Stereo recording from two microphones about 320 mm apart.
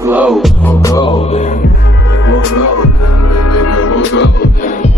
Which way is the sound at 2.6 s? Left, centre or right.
Left.